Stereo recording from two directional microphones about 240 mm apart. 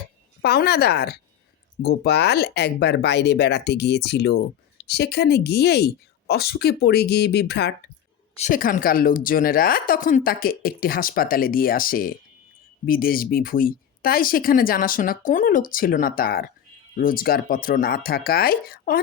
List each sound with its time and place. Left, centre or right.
0.4 s a woman's voice: left